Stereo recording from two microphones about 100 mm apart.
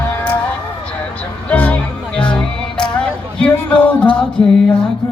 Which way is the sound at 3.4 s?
10° left (ahead or behind).